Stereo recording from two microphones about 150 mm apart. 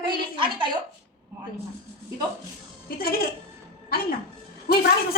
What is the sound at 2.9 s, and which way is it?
Speech, 80° left.